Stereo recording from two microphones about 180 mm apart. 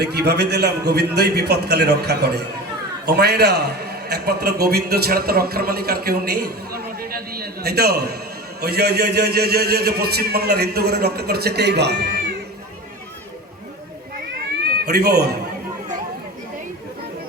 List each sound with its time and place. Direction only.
0.0 s a man's voice: 65° right (ahead or behind)
14.8 s a man's voice: 60° right (ahead or behind)